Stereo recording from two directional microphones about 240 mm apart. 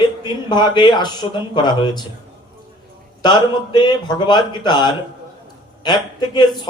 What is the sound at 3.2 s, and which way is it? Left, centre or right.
A man's voice, centre.